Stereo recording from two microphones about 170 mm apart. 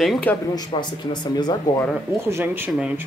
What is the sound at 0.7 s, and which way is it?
Speech, 25° left (ahead or behind).